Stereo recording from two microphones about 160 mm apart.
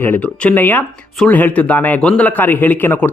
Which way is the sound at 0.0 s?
10° left (ahead or behind).